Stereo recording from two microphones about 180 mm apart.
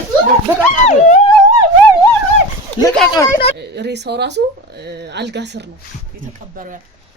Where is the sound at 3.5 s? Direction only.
70° right (ahead or behind).